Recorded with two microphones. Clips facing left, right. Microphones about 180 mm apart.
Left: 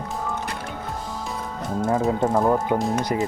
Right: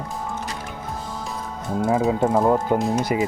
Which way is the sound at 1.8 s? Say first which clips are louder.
Right 2 dB; 10° right (ahead or behind).